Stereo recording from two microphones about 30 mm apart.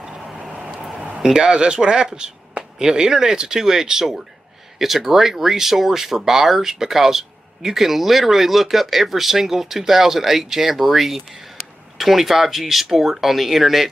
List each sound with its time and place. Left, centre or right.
1.2 s speech: right; by 13.8 s centre